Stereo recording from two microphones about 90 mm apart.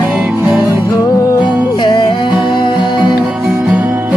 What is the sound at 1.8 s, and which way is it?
Music, 60° left (ahead or behind).